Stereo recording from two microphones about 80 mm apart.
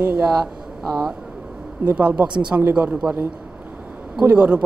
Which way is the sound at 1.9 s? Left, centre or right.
Centre.